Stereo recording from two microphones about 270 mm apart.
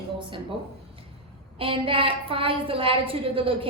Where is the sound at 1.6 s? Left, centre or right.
Centre.